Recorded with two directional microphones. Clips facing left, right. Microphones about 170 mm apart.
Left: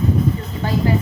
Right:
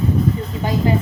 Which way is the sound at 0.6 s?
15° right (ahead or behind).